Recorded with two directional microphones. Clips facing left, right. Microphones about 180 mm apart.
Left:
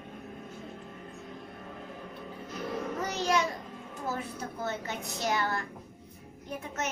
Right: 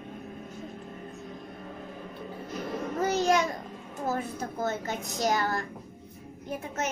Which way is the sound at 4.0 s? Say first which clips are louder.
Right 5 dB; 45° right (ahead or behind).